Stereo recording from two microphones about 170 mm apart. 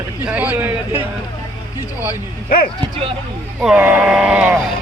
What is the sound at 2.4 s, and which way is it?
Speech, 60° left (ahead or behind).